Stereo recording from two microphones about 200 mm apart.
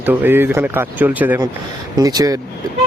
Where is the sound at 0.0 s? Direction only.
10° right (ahead or behind).